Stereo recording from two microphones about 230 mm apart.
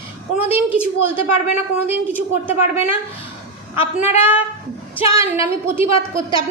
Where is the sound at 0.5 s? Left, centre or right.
Centre.